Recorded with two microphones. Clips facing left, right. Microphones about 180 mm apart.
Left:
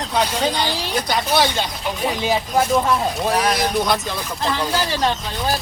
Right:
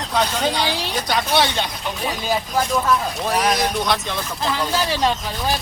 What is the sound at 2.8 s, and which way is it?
Speech, 25° left (ahead or behind).